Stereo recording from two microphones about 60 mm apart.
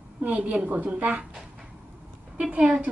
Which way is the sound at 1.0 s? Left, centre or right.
Centre.